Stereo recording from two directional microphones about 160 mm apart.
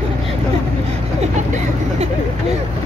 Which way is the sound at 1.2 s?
45° right (ahead or behind).